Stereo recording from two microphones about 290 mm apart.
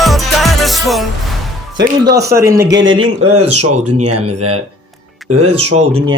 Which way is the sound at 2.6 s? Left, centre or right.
Right.